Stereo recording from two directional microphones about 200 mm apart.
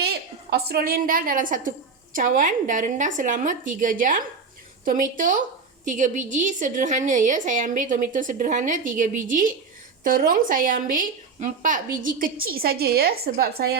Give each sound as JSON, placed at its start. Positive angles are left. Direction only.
{"t": 0.0, "sound": "a woman's voice", "side_deg": -55}